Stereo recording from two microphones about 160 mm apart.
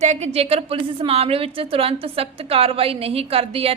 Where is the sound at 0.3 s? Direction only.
40° right (ahead or behind).